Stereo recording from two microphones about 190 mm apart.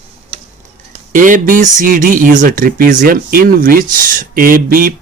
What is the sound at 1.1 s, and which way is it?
Speech, 45° right (ahead or behind).